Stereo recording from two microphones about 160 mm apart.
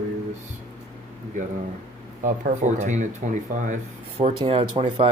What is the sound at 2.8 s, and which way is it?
Speech, 45° right (ahead or behind).